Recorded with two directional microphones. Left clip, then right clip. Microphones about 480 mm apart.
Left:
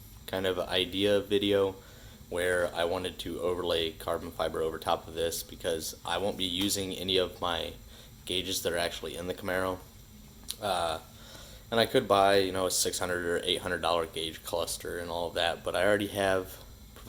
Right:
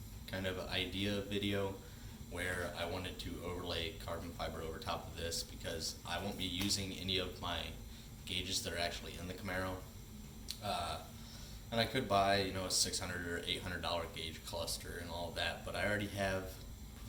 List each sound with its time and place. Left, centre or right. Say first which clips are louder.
0.3 s speech: left 11 dB; centre